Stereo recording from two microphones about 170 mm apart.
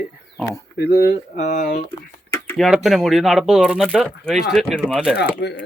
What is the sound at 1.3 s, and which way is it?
Speech, 45° left (ahead or behind).